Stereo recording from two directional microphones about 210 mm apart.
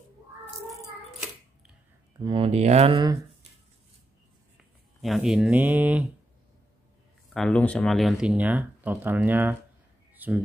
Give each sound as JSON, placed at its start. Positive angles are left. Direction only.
{"t": 2.1, "sound": "speech", "side_deg": -20}
{"t": 4.6, "sound": "speech", "side_deg": 0}
{"t": 7.3, "sound": "speech", "side_deg": 5}